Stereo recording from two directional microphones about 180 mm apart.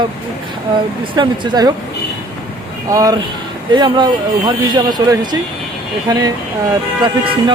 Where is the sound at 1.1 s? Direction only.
25° right (ahead or behind).